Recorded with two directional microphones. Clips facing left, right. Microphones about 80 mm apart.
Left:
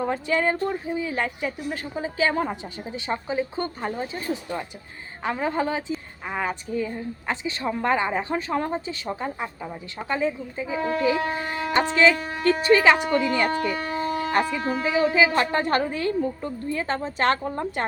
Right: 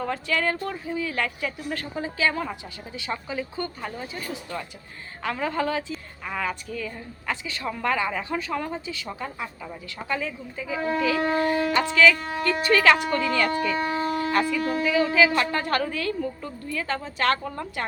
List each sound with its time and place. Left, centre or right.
0.0 s a woman's voice: left
4.5 s a woman's voice: centre